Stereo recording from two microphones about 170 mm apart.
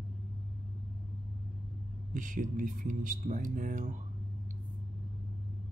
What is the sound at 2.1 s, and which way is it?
Speech, 50° right (ahead or behind).